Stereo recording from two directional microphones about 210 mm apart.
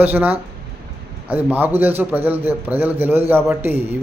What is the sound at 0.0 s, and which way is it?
A man's voice, 10° right (ahead or behind).